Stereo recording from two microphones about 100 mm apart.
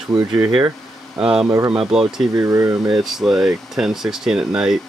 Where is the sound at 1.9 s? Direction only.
5° right (ahead or behind).